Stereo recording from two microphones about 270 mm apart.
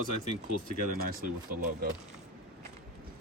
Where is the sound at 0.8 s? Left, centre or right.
Right.